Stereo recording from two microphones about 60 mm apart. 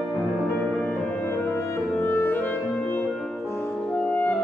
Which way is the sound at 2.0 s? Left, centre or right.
Left.